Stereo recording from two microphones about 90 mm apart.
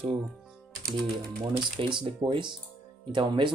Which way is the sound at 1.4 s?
60° right (ahead or behind).